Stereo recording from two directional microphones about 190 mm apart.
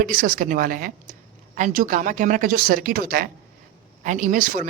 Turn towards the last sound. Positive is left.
turn(degrees=-45)  # may be behind; listen again after turning